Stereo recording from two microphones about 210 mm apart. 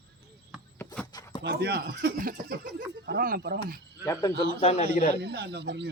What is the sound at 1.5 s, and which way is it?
Speech, 50° right (ahead or behind).